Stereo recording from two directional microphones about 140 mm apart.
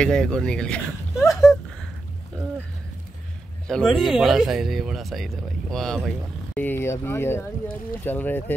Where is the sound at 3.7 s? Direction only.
Centre (ahead or behind).